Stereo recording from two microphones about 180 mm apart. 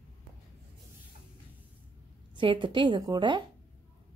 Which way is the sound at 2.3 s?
25° right (ahead or behind).